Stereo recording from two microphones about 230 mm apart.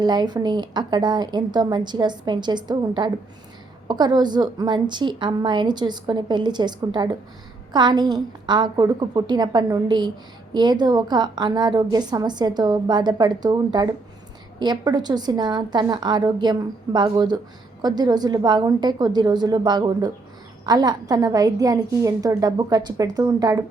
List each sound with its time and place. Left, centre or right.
0.0 s a woman's voice: centre